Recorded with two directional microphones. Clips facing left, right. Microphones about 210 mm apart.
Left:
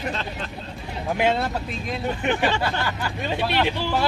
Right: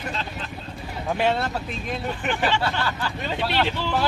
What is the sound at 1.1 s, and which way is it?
Speech, 15° left (ahead or behind).